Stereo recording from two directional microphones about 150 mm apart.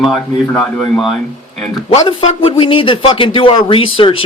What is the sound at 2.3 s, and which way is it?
Speech, 35° left (ahead or behind).